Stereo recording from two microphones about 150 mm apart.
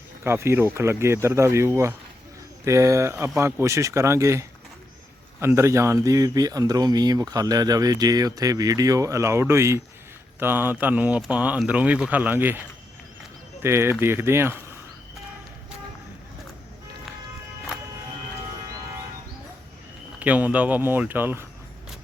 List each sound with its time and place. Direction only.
0.3 s speech: 15° right (ahead or behind)
20.1 s speech: 10° right (ahead or behind)